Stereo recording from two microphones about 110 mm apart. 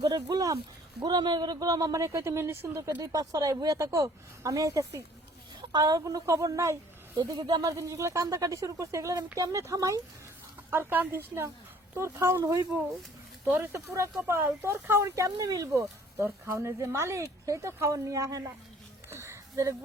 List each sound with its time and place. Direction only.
0.0 s speech: 40° right (ahead or behind)
7.3 s speech: 40° right (ahead or behind)
10.7 s speech: 20° right (ahead or behind)
13.5 s speech: 20° right (ahead or behind)
19.1 s a sound: 25° right (ahead or behind)